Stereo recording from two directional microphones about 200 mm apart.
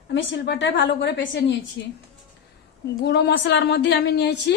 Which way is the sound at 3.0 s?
60° left (ahead or behind).